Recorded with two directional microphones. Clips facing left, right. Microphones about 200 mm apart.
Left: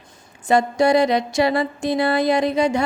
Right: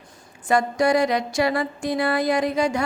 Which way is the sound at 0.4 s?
25° left (ahead or behind).